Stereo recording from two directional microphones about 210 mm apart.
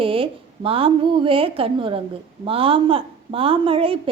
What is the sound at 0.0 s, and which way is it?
Speech, 25° right (ahead or behind).